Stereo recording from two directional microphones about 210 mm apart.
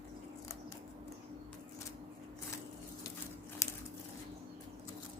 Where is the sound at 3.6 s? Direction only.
15° left (ahead or behind).